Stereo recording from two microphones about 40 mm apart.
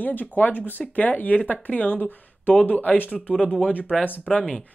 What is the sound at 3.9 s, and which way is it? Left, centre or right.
Speech, centre.